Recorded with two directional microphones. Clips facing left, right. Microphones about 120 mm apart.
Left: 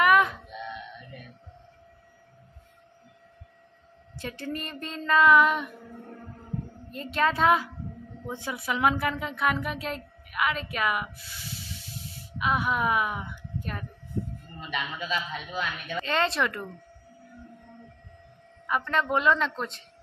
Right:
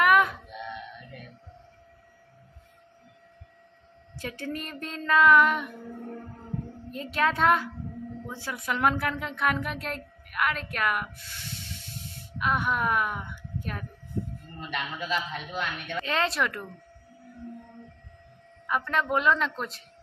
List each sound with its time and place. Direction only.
0.0 s a sound: centre (ahead or behind)
4.2 s a woman's voice: centre (ahead or behind)
6.9 s a woman's voice: centre (ahead or behind)
8.3 s a woman's voice: 20° left (ahead or behind)
8.5 s speech: 5° left (ahead or behind)
13.3 s a sound: centre (ahead or behind)
14.6 s a woman's voice: centre (ahead or behind)
18.7 s a woman's voice: centre (ahead or behind)